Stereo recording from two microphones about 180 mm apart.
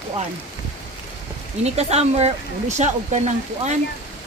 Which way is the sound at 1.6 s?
35° right (ahead or behind).